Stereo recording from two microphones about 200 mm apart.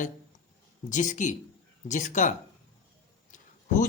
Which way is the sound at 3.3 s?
40° left (ahead or behind).